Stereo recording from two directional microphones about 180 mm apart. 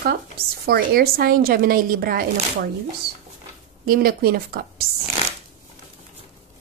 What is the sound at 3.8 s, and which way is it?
A woman's voice, 55° right (ahead or behind).